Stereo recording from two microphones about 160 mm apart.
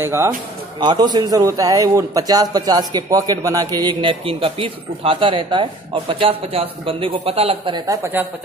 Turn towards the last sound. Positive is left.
turn(degrees=-30)  # may be behind; listen again after turning